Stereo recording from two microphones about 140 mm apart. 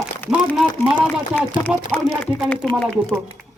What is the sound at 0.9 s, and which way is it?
A man's voice, 10° left (ahead or behind).